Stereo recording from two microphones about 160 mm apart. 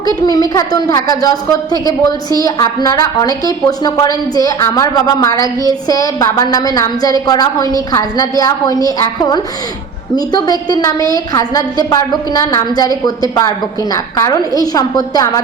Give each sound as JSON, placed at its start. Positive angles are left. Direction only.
{"t": 0.0, "sound": "a woman's voice", "side_deg": 25}